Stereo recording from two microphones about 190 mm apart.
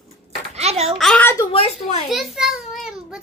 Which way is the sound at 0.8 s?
Centre (ahead or behind).